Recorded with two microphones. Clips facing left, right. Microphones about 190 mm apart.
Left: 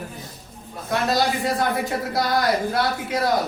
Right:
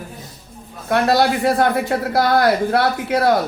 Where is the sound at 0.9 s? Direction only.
65° right (ahead or behind).